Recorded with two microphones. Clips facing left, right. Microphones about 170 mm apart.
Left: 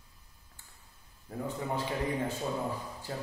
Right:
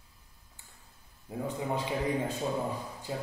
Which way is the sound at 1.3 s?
15° right (ahead or behind).